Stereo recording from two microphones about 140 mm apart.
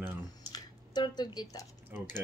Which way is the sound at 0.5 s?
30° left (ahead or behind).